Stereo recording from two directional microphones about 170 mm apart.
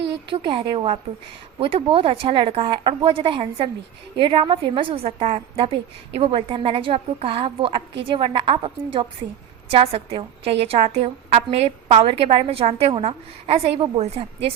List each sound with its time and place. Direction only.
0.3 s a woman's voice: 30° right (ahead or behind)